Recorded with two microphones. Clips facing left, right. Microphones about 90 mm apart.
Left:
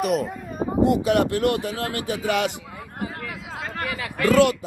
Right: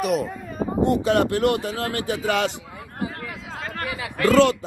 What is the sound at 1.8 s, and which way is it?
Speech, 20° left (ahead or behind).